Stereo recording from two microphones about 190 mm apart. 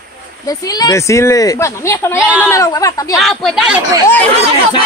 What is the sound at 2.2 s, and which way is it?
Speech, 10° right (ahead or behind).